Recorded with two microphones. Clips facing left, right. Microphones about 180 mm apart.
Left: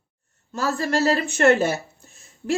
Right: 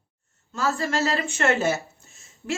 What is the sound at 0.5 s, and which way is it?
Speech, 35° left (ahead or behind).